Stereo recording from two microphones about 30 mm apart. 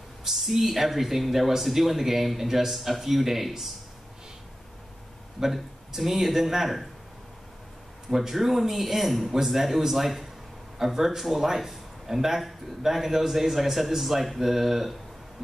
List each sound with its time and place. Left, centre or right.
0.2 s speech: centre
5.4 s speech: centre
8.1 s a man's voice: centre